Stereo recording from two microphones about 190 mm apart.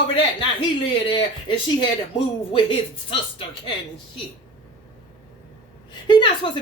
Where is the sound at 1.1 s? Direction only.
25° left (ahead or behind).